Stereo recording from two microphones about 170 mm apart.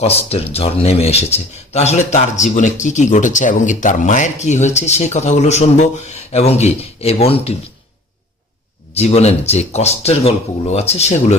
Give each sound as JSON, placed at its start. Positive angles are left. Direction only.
{"t": 0.0, "sound": "speech", "side_deg": 35}
{"t": 9.0, "sound": "speech", "side_deg": 40}